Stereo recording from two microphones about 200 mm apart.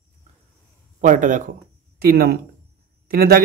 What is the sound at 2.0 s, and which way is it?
Speech, 50° right (ahead or behind).